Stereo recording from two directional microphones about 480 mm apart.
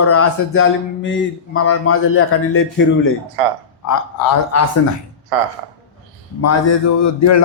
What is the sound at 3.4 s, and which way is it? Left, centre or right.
Speech, right.